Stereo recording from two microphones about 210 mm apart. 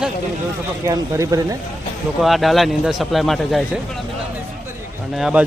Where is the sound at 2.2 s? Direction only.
Centre (ahead or behind).